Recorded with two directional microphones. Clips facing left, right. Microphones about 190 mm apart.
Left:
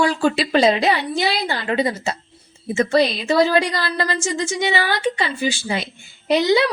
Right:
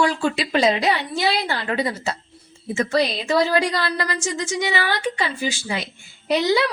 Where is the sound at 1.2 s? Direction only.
20° left (ahead or behind).